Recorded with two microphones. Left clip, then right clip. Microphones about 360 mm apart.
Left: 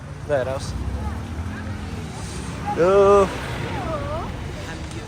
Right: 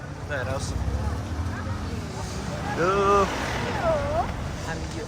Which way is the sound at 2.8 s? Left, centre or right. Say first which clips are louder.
Left 6 dB; centre.